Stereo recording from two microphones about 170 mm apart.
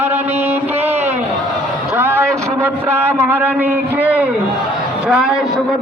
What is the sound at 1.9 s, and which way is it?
A man's voice, 15° right (ahead or behind).